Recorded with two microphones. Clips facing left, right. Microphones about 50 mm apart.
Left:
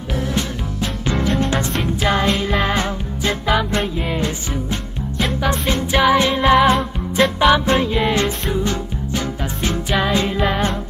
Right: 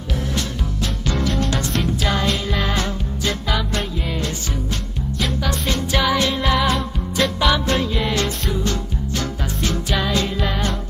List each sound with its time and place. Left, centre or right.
0.3 s music: left